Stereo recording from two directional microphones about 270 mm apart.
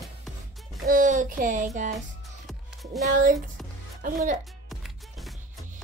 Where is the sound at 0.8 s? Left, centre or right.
Right.